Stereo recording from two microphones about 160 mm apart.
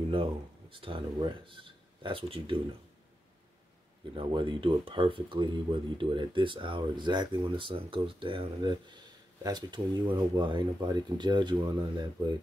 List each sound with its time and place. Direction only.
0.1 s speech: 35° right (ahead or behind)
4.1 s speech: 30° right (ahead or behind)